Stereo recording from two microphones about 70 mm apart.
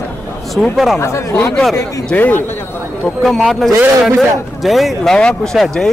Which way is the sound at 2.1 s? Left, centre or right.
Left.